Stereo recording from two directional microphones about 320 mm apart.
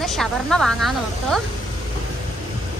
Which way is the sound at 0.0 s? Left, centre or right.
Centre.